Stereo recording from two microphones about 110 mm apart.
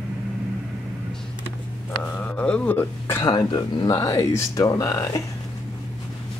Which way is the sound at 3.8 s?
25° left (ahead or behind).